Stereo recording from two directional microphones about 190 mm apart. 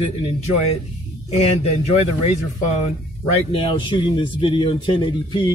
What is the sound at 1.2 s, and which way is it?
Speech, 35° left (ahead or behind).